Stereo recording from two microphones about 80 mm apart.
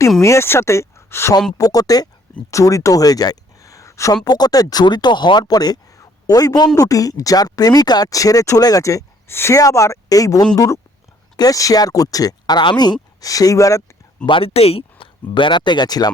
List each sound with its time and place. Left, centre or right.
0.2 s speech: left
1.5 s speech: left
4.1 s speech: left
6.0 s a sound: left
6.7 s speech: left
9.3 s speech: left
9.6 s speech: left
14.9 s speech: left